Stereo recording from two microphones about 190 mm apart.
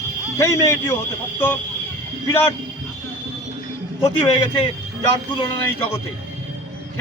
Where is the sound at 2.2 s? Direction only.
10° left (ahead or behind).